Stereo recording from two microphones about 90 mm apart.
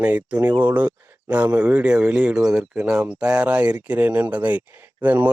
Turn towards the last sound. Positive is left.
turn(degrees=-20)  # may be behind; listen again after turning